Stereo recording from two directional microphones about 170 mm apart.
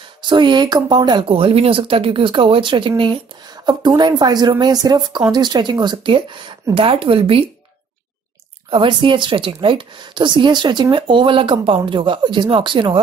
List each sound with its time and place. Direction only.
0.2 s speech: 25° right (ahead or behind)
8.6 s speech: 30° right (ahead or behind)